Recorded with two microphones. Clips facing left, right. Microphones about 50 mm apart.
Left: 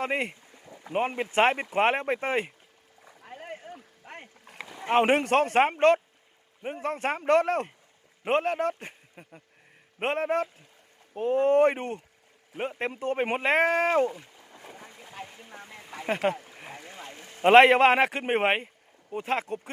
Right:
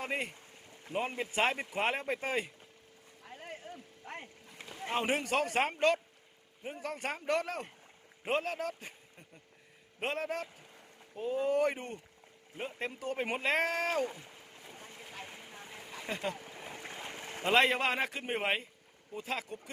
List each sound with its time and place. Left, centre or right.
0.0 s a man's voice: left
0.9 s speech: left
3.2 s a sound: left
4.4 s rowboat: left
4.9 s a man's voice: left
10.0 s speech: left
11.1 s a man's voice: left
15.5 s boat: left
17.1 s a sound: right
17.4 s a man's voice: left